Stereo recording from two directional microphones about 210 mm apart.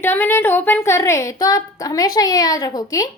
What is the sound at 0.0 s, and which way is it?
A woman's voice, 10° left (ahead or behind).